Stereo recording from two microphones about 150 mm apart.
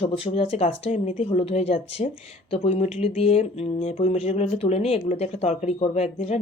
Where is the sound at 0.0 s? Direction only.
40° left (ahead or behind).